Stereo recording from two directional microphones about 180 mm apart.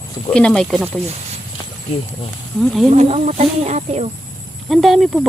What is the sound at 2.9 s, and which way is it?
Speech, 35° right (ahead or behind).